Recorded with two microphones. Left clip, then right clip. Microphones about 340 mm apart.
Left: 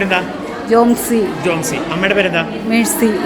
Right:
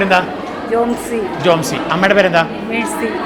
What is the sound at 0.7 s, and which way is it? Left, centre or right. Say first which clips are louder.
Speech: left 4 dB; left.